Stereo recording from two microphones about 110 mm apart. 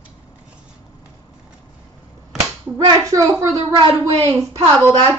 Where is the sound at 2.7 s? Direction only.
35° right (ahead or behind).